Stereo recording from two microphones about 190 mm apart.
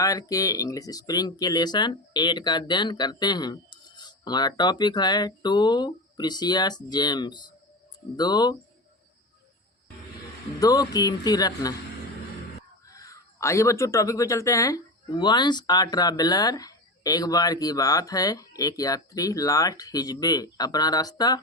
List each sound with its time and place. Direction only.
0.0 s speech: 20° left (ahead or behind)
10.6 s speech: 20° left (ahead or behind)
12.9 s speech: 15° left (ahead or behind)